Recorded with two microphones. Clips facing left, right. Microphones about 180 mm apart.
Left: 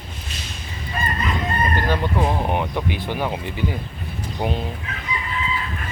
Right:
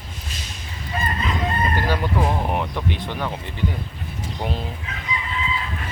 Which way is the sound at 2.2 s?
5° left (ahead or behind).